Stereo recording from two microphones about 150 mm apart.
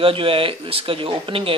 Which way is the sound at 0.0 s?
35° right (ahead or behind).